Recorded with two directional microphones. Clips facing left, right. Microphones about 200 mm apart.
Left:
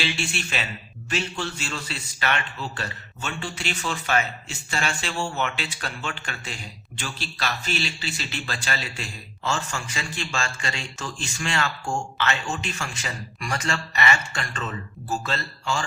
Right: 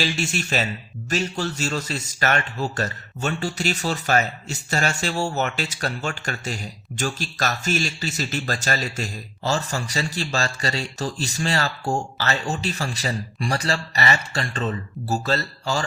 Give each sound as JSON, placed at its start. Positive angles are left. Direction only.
{"t": 0.0, "sound": "a man's voice", "side_deg": -40}